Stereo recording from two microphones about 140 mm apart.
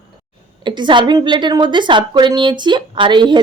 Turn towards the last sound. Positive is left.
turn(degrees=-35)  # may be behind; listen again after turning